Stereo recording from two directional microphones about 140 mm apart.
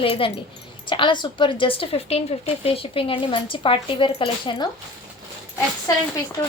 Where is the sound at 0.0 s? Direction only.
40° left (ahead or behind).